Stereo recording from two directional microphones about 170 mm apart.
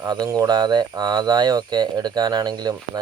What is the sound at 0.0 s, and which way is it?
A man's voice, 20° right (ahead or behind).